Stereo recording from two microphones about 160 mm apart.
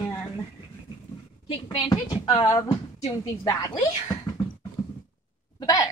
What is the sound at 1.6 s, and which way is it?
A woman's voice, 30° left (ahead or behind).